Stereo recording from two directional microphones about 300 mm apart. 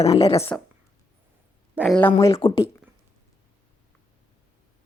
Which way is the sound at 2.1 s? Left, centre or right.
Centre.